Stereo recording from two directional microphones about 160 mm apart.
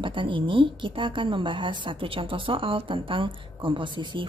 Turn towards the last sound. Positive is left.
turn(degrees=-30)  # may be behind; listen again after turning